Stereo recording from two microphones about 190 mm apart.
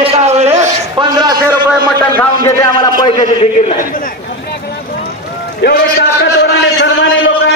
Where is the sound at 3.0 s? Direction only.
30° left (ahead or behind).